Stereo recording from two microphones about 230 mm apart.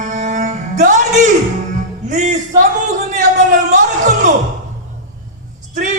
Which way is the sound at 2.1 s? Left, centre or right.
Right.